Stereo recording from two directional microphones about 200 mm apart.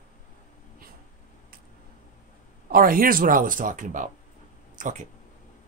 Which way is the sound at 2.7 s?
45° right (ahead or behind).